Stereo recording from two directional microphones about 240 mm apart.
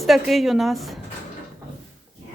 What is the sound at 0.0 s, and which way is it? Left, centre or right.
A woman's voice, centre.